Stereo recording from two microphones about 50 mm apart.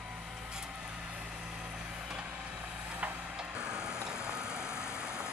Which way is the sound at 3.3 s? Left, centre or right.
Centre.